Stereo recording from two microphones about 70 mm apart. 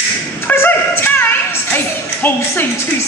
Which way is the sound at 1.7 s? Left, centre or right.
Left.